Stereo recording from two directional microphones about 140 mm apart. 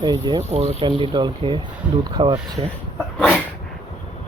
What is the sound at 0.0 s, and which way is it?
Speech, 30° right (ahead or behind).